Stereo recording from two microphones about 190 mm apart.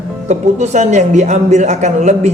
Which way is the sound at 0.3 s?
35° right (ahead or behind).